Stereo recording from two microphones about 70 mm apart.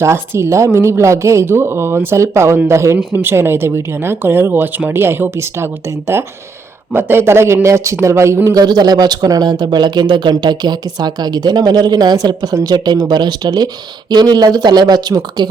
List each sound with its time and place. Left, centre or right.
0.0 s a woman's voice: right
8.5 s speech: right